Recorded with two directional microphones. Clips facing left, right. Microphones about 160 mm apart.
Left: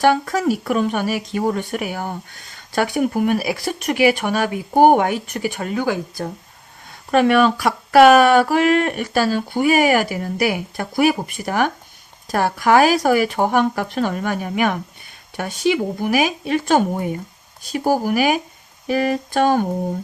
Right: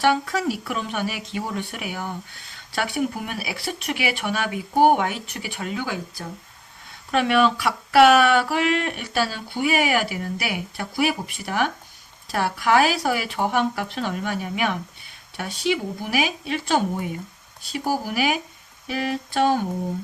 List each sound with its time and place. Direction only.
0.0 s speech: 45° left (ahead or behind)